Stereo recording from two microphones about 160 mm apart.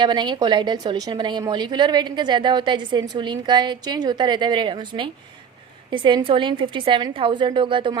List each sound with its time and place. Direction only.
0.0 s a woman's voice: 30° right (ahead or behind)